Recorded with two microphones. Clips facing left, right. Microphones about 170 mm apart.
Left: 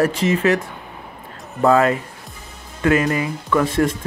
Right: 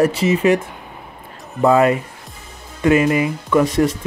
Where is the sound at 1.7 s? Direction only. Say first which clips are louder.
Right 1 dB; 15° right (ahead or behind).